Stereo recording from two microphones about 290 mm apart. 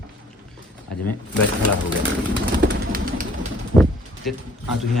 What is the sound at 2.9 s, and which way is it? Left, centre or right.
Pigeon, right.